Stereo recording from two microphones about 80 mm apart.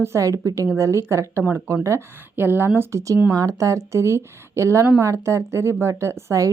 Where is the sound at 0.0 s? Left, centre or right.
Right.